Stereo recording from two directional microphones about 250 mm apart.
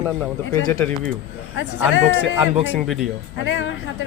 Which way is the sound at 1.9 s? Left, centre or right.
Left.